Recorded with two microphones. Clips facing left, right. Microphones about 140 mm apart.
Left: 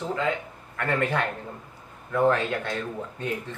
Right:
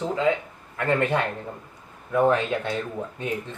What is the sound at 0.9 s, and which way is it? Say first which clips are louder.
A man's voice: right 3 dB; 20° right (ahead or behind).